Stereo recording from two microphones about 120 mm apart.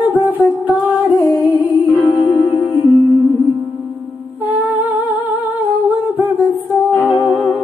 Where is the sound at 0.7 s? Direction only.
15° right (ahead or behind).